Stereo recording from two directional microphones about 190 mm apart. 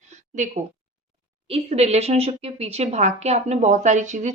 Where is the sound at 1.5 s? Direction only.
30° right (ahead or behind).